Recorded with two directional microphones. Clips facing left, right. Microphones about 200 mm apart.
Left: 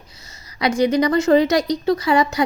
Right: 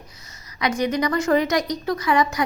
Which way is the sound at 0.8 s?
30° left (ahead or behind).